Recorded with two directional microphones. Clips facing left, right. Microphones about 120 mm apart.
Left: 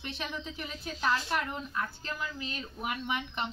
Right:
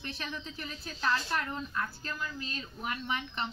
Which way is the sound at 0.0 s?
15° left (ahead or behind).